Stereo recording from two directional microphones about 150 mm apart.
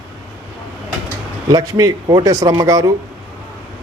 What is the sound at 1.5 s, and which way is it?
Speech, 25° right (ahead or behind).